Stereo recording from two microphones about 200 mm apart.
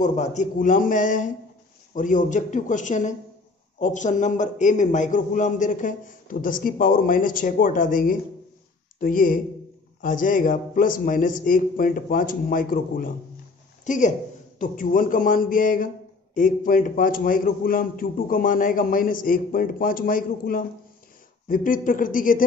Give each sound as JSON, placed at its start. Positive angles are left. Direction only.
{"t": 0.0, "sound": "a man's voice", "side_deg": 35}